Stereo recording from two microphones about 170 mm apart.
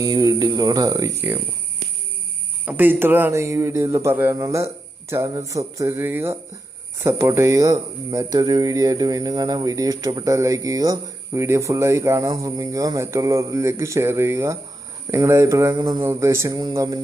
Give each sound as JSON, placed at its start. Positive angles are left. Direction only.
{"t": 0.0, "sound": "speech", "side_deg": -20}
{"t": 2.6, "sound": "a man's voice", "side_deg": -10}